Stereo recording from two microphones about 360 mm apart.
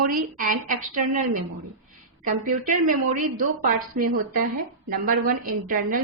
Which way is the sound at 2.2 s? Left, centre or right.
Right.